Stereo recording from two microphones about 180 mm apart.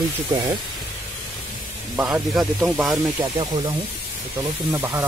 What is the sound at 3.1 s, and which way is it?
Speech, 25° right (ahead or behind).